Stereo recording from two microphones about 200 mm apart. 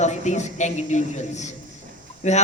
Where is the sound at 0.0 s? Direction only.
35° left (ahead or behind).